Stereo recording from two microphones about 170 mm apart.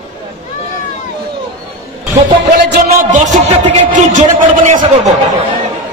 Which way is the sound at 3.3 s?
45° right (ahead or behind).